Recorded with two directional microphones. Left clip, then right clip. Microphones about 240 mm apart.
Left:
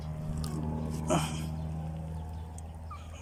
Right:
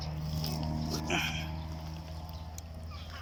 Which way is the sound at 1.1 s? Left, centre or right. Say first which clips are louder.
Left 2 dB; left.